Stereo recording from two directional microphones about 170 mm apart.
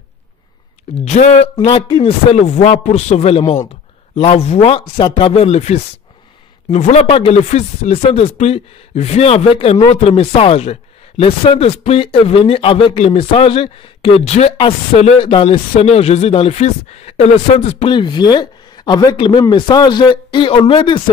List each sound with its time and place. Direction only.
1.0 s speech: 45° left (ahead or behind); by 21.0 s 30° left (ahead or behind)